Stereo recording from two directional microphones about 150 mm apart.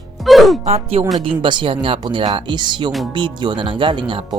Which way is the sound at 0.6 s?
40° right (ahead or behind).